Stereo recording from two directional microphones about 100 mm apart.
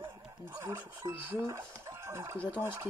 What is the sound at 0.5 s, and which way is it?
Speech, 35° right (ahead or behind).